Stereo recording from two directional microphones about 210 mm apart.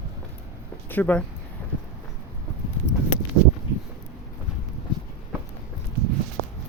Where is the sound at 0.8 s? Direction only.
10° left (ahead or behind).